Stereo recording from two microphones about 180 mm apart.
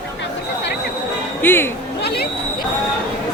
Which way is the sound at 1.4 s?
10° left (ahead or behind).